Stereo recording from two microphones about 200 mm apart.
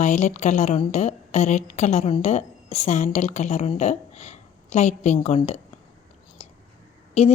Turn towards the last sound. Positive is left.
turn(degrees=30)  # may be behind; listen again after turning